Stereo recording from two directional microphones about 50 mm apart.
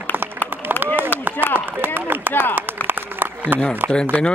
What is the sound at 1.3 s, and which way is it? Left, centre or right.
Chop, left.